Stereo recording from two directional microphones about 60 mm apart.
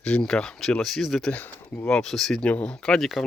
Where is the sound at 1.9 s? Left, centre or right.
Centre.